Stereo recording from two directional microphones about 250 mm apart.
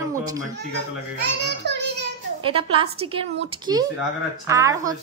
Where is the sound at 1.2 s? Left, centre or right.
Right.